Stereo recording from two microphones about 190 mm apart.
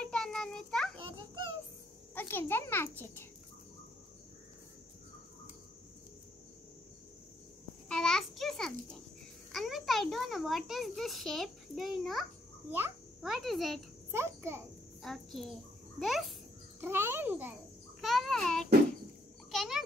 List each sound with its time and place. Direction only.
0.0 s children playing: 5° left (ahead or behind)
1.1 s a sound: 20° right (ahead or behind)
2.1 s a child's voice: 10° left (ahead or behind)
7.9 s a sound: 5° left (ahead or behind)
12.7 s a child's voice: 5° right (ahead or behind)
14.1 s a child's voice: 15° right (ahead or behind)
15.0 s a child's voice: centre (ahead or behind)
16.8 s a child's voice: 10° right (ahead or behind)
18.0 s child singing: centre (ahead or behind)
19.5 s a sound: centre (ahead or behind)